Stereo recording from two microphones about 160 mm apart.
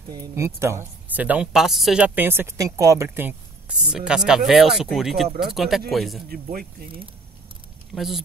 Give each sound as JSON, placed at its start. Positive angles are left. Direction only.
{"t": 0.1, "sound": "a woman's voice", "side_deg": -20}
{"t": 6.2, "sound": "speech", "side_deg": -65}
{"t": 7.9, "sound": "speech", "side_deg": 0}